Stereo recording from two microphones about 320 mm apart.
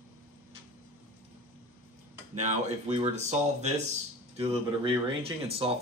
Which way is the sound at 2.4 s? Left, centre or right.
Right.